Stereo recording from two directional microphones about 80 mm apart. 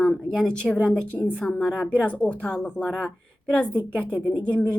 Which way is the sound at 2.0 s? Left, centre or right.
Centre.